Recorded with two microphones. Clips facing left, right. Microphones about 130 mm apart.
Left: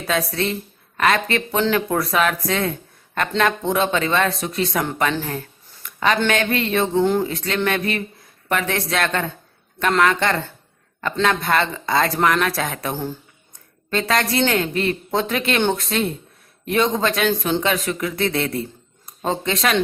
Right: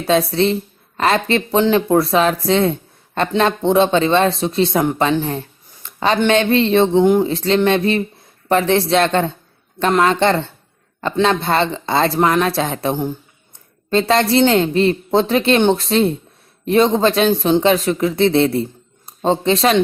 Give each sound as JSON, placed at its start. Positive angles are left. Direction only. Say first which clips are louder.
{"t": 0.0, "sound": "speech", "louder": "right 7 dB", "side_deg": -30}
{"t": 7.0, "sound": "speech", "louder": "right 5 dB", "side_deg": -15}
{"t": 7.3, "sound": "a man's voice", "louder": "right 7 dB", "side_deg": -30}
{"t": 17.2, "sound": "speech", "louder": "right 6 dB", "side_deg": -20}
{"t": 17.6, "sound": "speech", "louder": "right 7 dB", "side_deg": -30}